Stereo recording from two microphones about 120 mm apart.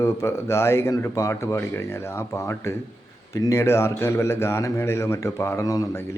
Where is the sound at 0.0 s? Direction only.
20° left (ahead or behind).